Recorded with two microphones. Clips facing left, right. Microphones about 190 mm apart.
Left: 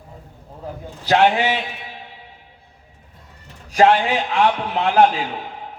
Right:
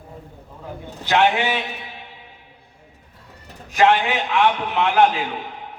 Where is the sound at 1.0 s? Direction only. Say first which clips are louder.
Left 2 dB; 40° left (ahead or behind).